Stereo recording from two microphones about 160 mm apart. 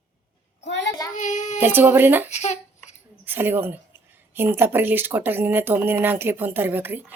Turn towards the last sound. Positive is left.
turn(degrees=-10)  # may be behind; listen again after turning